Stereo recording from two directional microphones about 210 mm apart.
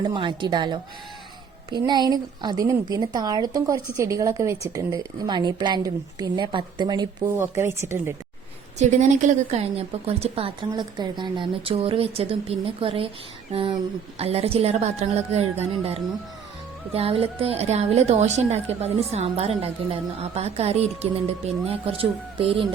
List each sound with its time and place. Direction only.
0.0 s a woman's voice: 20° right (ahead or behind)
1.9 s a woman's voice: 20° right (ahead or behind)
8.8 s a woman's voice: 35° right (ahead or behind)